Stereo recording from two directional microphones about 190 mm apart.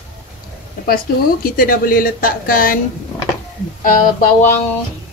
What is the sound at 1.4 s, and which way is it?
A woman's voice, 50° left (ahead or behind).